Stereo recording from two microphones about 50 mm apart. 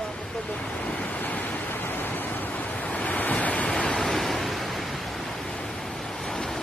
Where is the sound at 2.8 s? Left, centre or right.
Left.